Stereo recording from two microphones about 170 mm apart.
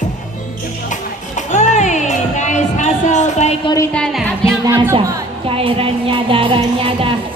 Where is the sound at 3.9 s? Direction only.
5° left (ahead or behind).